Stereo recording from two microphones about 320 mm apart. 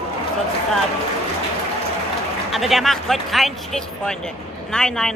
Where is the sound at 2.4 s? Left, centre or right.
Centre.